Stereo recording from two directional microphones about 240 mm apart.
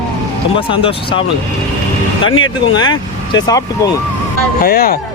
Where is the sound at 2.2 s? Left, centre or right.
Left.